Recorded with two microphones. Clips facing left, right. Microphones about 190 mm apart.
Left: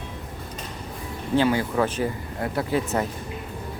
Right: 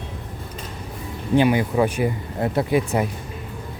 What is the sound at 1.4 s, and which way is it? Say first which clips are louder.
Speech: right 3 dB; 15° right (ahead or behind).